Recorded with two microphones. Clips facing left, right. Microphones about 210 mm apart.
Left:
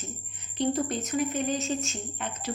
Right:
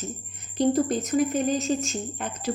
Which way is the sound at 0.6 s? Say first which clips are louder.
Right 5 dB; 40° right (ahead or behind).